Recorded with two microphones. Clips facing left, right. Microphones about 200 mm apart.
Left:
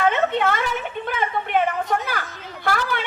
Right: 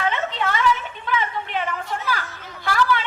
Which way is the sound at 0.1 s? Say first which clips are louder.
Left 4 dB; 55° left (ahead or behind).